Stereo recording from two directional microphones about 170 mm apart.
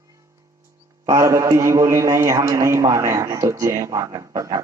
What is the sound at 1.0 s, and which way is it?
A man's voice, 15° right (ahead or behind).